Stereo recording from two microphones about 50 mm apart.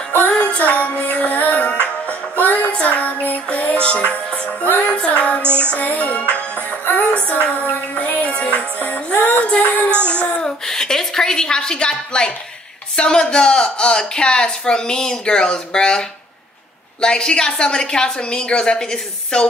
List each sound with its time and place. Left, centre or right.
0.5 s music: left
5.4 s music: right
5.7 s music: left
10.0 s child singing: left
10.7 s a sound: centre
12.9 s speech: centre